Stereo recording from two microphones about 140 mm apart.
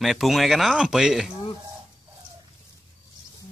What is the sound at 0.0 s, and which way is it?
Speech, centre (ahead or behind).